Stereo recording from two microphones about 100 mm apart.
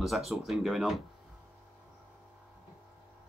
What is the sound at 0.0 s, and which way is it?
Speech, centre (ahead or behind).